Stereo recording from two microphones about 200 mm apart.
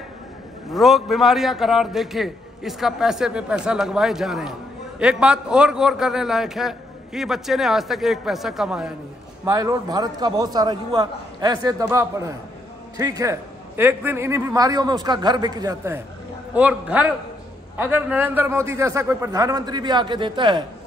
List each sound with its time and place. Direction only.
0.7 s a man's voice: centre (ahead or behind)
9.4 s a man's voice: 15° right (ahead or behind)